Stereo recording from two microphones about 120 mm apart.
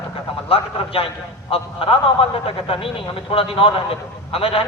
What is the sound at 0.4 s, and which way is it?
A man's voice, 50° left (ahead or behind).